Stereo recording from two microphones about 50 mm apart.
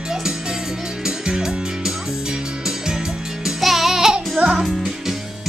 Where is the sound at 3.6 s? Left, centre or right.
Centre.